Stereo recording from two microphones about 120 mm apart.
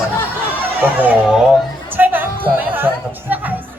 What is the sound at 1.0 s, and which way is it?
Speech, 10° right (ahead or behind).